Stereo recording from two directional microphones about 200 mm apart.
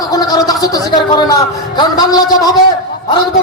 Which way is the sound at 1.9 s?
20° left (ahead or behind).